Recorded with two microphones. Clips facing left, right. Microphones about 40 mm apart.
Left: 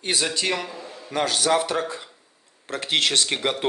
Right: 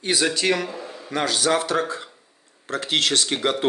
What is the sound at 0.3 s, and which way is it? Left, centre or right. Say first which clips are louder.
Speech: right 3 dB; centre.